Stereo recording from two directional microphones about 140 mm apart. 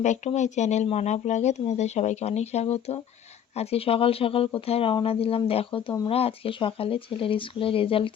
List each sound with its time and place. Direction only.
0.0 s speech: 55° left (ahead or behind); by 8.1 s 40° left (ahead or behind)